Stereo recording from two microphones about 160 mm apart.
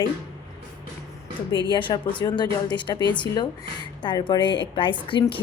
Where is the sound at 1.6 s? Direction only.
30° left (ahead or behind).